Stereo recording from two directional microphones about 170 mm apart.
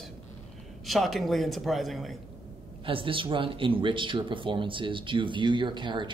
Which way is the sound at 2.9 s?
30° right (ahead or behind).